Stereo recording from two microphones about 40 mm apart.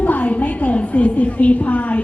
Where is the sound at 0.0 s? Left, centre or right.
Left.